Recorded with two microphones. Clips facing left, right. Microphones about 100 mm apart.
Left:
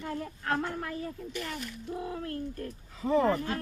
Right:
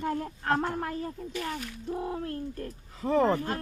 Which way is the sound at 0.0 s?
40° right (ahead or behind).